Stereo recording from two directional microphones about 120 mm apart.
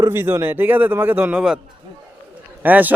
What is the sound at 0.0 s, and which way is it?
Speech, 20° right (ahead or behind).